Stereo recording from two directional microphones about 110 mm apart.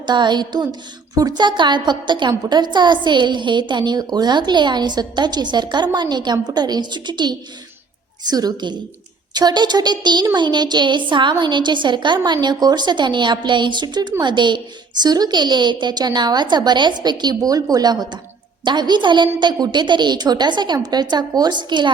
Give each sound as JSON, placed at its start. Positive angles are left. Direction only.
{"t": 0.0, "sound": "a woman's voice", "side_deg": -45}